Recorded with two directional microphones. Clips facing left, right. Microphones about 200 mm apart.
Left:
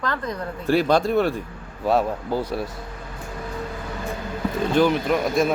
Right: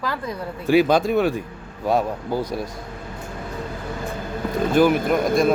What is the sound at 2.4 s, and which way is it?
Speech, 10° left (ahead or behind).